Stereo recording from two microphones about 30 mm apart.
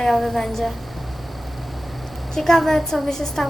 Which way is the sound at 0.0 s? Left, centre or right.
Centre.